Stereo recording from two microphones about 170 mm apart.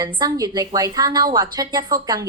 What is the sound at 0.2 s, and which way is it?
A woman's voice, 20° right (ahead or behind).